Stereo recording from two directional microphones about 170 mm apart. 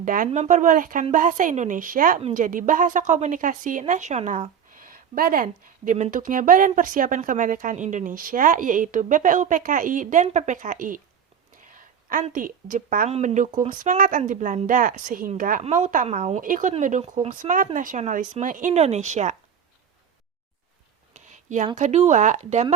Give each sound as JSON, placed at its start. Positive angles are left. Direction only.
{"t": 0.0, "sound": "a woman's voice", "side_deg": -55}
{"t": 13.1, "sound": "a woman's voice", "side_deg": -40}
{"t": 21.1, "sound": "a sound", "side_deg": -45}
{"t": 21.8, "sound": "a woman's voice", "side_deg": -45}